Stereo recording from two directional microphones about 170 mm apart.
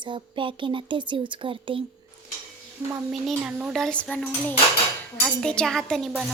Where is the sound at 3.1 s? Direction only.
5° right (ahead or behind).